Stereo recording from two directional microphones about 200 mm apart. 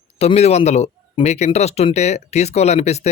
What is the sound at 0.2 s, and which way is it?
Speech, 30° left (ahead or behind).